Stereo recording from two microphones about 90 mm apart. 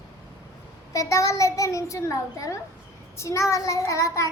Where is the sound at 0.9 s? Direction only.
35° left (ahead or behind).